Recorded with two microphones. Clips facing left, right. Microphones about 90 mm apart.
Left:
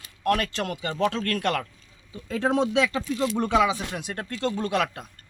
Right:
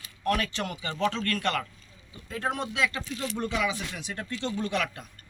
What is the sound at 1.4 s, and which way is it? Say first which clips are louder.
Speech: left 3 dB; 75° left (ahead or behind).